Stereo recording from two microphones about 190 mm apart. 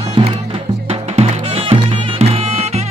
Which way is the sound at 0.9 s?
30° right (ahead or behind).